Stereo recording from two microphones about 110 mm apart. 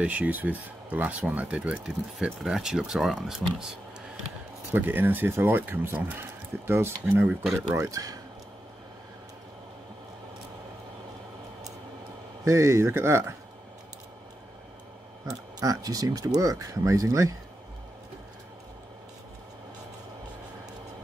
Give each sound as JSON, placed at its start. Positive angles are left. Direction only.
{"t": 0.0, "sound": "speech", "side_deg": -10}
{"t": 4.7, "sound": "speech", "side_deg": -20}
{"t": 7.7, "sound": "speech", "side_deg": -30}
{"t": 12.4, "sound": "speech", "side_deg": -30}
{"t": 15.6, "sound": "speech", "side_deg": -35}